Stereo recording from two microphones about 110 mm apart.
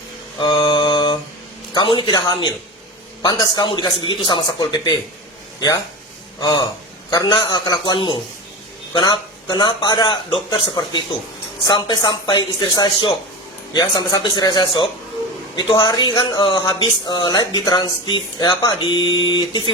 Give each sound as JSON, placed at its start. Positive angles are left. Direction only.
{"t": 0.5, "sound": "mantra", "side_deg": 40}
{"t": 1.7, "sound": "speech", "side_deg": 45}
{"t": 6.4, "sound": "a man's voice", "side_deg": 40}